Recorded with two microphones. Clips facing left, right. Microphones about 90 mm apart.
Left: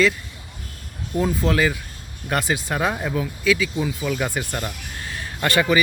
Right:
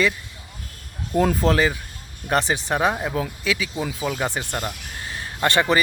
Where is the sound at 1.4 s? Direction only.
35° right (ahead or behind).